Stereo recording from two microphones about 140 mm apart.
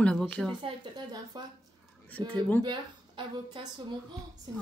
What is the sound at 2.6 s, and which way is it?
Speech, 35° right (ahead or behind).